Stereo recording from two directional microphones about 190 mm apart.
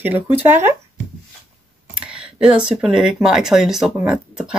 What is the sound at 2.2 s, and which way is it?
Speech, 5° right (ahead or behind).